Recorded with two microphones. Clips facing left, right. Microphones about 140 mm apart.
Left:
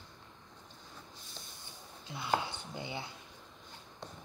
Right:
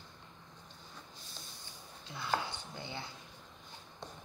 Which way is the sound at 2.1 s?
15° left (ahead or behind).